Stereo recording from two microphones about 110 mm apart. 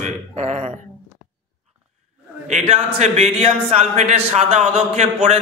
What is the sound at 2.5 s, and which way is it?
Speech, 80° right.